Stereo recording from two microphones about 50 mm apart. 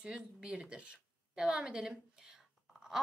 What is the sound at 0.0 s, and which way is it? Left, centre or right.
A woman's voice, centre.